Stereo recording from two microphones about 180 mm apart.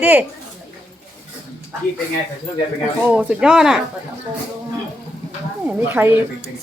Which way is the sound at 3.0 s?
10° right (ahead or behind).